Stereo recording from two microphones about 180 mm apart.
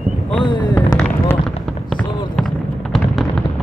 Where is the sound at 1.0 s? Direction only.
10° left (ahead or behind).